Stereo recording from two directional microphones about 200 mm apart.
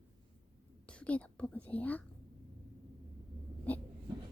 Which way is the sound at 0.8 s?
5° left (ahead or behind).